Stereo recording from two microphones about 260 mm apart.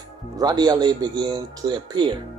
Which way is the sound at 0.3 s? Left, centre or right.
Centre.